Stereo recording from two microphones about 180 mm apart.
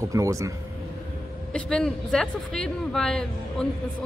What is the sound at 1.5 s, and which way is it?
Speech, 5° left (ahead or behind).